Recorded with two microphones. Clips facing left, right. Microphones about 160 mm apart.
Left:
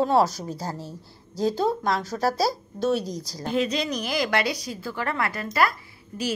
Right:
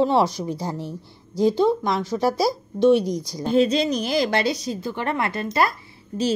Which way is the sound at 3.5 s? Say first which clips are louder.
Right 6 dB; 30° right (ahead or behind).